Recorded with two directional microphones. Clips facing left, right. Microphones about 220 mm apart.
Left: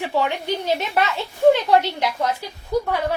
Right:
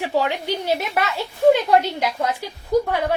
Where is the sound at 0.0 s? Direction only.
10° right (ahead or behind).